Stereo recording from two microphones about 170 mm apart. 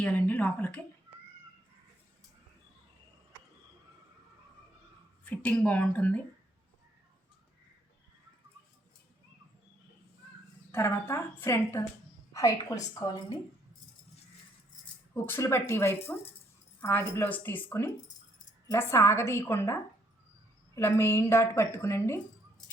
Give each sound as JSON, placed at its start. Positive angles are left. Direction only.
{"t": 0.0, "sound": "a woman's voice", "side_deg": 10}
{"t": 5.2, "sound": "a woman's voice", "side_deg": 10}
{"t": 10.7, "sound": "a woman's voice", "side_deg": 15}
{"t": 15.1, "sound": "a woman's voice", "side_deg": 15}
{"t": 22.6, "sound": "keys jangling", "side_deg": 5}